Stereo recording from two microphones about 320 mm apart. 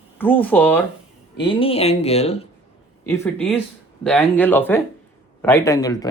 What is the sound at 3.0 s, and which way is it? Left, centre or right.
A man's voice, centre.